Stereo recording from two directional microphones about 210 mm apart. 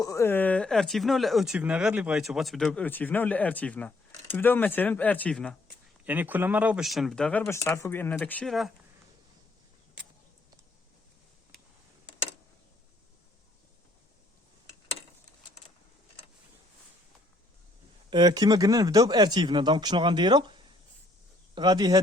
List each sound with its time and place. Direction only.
0.0 s speech: 15° left (ahead or behind)
6.1 s speech: 10° right (ahead or behind)
18.1 s speech: 20° right (ahead or behind)